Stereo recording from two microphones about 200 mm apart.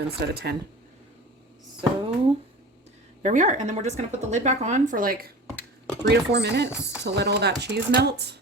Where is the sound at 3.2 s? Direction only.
35° right (ahead or behind).